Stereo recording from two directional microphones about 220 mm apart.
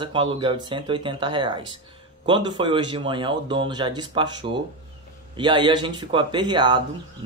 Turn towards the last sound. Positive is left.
turn(degrees=-20)  # may be behind; listen again after turning